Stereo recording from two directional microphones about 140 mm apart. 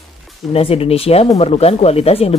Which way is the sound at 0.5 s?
45° left (ahead or behind).